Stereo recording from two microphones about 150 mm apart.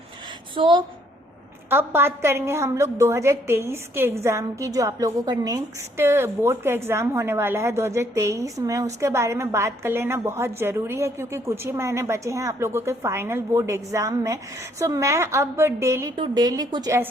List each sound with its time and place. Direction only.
0.5 s speech: 35° right (ahead or behind)
1.7 s a woman's voice: 15° right (ahead or behind)
16.1 s a woman's voice: 30° right (ahead or behind)